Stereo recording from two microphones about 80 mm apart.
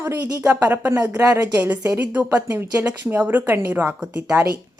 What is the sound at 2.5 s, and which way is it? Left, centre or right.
Speech, right.